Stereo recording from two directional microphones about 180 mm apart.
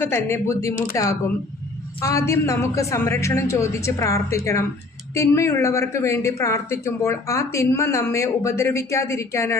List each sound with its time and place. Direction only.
0.0 s speech: 15° left (ahead or behind)